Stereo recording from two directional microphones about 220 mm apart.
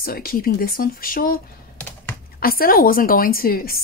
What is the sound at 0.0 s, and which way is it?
Speech, 45° left (ahead or behind).